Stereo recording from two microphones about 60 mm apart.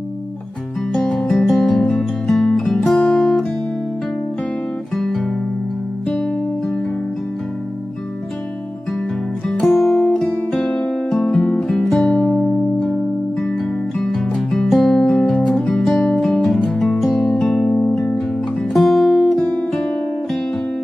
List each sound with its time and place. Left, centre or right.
0.9 s music: centre
3.0 s music: centre
4.9 s guitar: centre
9.5 s music: centre
19.4 s music: centre